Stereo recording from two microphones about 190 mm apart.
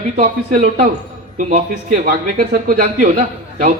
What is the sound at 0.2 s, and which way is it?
A man's voice, 45° right (ahead or behind).